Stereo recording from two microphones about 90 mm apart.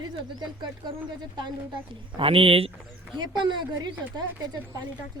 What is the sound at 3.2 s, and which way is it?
Speech, 60° right (ahead or behind).